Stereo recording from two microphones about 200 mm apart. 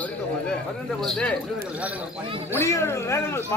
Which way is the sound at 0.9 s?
Centre (ahead or behind).